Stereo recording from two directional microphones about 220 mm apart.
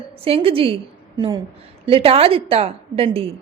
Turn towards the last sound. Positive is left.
turn(degrees=-25)  # may be behind; listen again after turning